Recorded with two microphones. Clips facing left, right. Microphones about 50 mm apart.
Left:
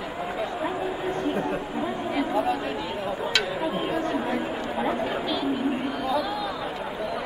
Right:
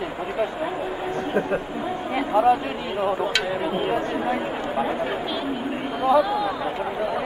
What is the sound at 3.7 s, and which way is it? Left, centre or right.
Speech, centre.